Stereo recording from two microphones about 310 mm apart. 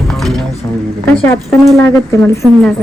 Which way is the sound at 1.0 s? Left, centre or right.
Centre.